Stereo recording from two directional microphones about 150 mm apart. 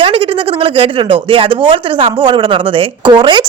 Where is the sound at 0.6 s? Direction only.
35° right (ahead or behind).